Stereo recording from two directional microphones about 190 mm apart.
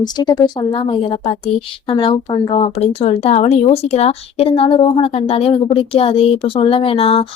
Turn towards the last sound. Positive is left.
turn(degrees=30)  # may be behind; listen again after turning